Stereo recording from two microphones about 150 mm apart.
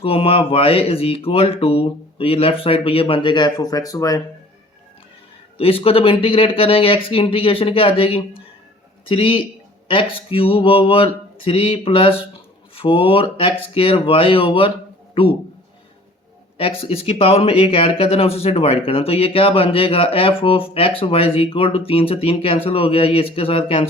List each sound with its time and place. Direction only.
0.0 s speech: 40° left (ahead or behind); by 4.2 s 20° left (ahead or behind)
5.5 s a man's voice: 40° left (ahead or behind)
16.6 s speech: 40° left (ahead or behind)